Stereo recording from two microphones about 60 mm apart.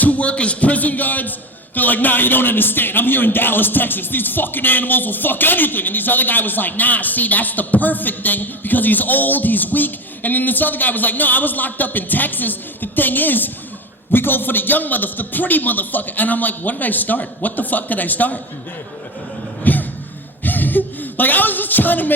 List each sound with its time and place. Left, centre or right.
0.0 s a man's voice: left
19.7 s a sound: left
20.4 s a woman's voice: left